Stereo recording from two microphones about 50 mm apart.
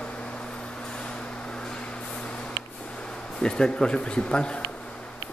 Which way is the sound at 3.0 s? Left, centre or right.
Centre.